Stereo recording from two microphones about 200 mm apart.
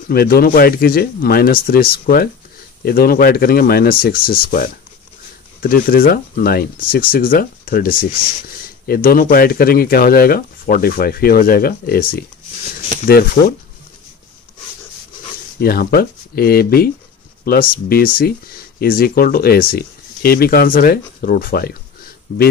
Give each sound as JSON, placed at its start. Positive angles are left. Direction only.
{"t": 0.1, "sound": "speech", "side_deg": 50}
{"t": 15.6, "sound": "speech", "side_deg": 50}